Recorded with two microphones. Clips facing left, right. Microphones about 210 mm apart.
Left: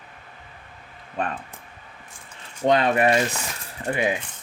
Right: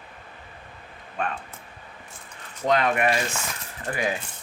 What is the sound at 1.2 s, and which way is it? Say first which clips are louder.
Speech: left 2 dB; 35° left (ahead or behind).